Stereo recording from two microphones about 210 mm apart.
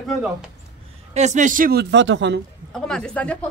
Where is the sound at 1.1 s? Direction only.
35° right (ahead or behind); by 2.4 s 60° right (ahead or behind).